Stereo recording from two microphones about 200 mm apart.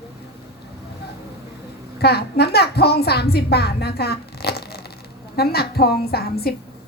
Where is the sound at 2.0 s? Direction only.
55° left (ahead or behind).